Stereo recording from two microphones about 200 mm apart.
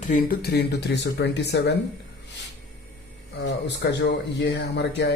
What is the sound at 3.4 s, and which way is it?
Speech, 60° left (ahead or behind).